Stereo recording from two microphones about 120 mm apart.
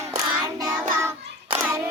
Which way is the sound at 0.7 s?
15° right (ahead or behind).